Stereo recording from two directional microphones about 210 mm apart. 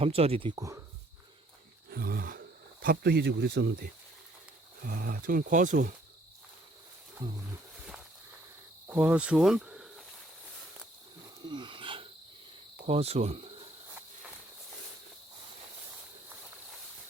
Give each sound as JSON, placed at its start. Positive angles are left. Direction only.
{"t": 0.0, "sound": "speech", "side_deg": -30}
{"t": 1.9, "sound": "speech", "side_deg": -45}
{"t": 4.9, "sound": "speech", "side_deg": -45}
{"t": 7.2, "sound": "speech", "side_deg": -15}
{"t": 8.9, "sound": "speech", "side_deg": -5}
{"t": 11.4, "sound": "a sound", "side_deg": -20}
{"t": 12.8, "sound": "speech", "side_deg": -30}